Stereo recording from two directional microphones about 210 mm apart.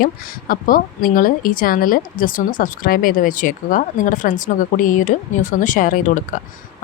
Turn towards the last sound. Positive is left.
turn(degrees=40)  # may be behind; listen again after turning